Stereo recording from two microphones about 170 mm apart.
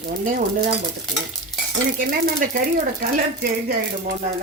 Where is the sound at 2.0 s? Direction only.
55° right (ahead or behind).